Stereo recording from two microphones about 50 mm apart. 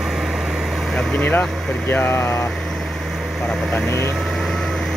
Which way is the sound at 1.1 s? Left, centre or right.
Left.